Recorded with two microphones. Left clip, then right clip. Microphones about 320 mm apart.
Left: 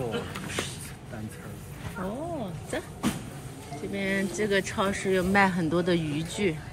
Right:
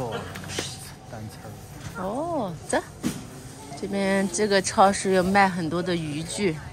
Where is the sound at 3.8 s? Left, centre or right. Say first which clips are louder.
Right 5 dB; right.